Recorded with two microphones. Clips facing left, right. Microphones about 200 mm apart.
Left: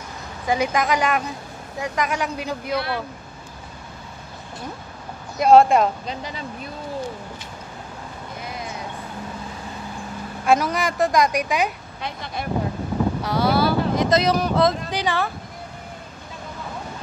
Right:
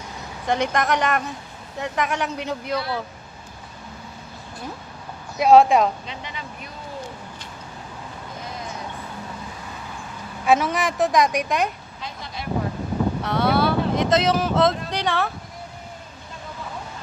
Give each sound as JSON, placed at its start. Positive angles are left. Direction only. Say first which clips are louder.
{"t": 0.5, "sound": "a woman's voice", "louder": "left 1 dB", "side_deg": 5}
{"t": 5.4, "sound": "a woman's voice", "louder": "even", "side_deg": 0}
{"t": 6.0, "sound": "speech", "louder": "left 4 dB", "side_deg": 35}
{"t": 10.4, "sound": "a woman's voice", "louder": "even", "side_deg": 0}
{"t": 12.0, "sound": "speech", "louder": "left 4 dB", "side_deg": 60}
{"t": 13.2, "sound": "speech", "louder": "even", "side_deg": 0}